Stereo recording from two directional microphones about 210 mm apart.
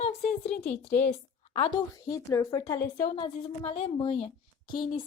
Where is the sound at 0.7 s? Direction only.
10° left (ahead or behind).